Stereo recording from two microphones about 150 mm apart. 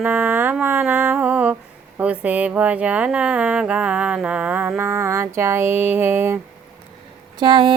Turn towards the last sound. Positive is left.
turn(degrees=-35)  # may be behind; listen again after turning